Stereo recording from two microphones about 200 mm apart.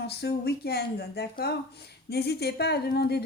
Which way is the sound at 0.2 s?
50° left (ahead or behind).